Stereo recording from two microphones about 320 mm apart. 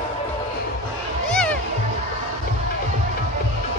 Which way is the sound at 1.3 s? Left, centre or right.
Centre.